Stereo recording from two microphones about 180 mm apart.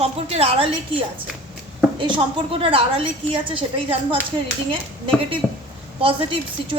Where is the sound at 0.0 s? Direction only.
35° right (ahead or behind).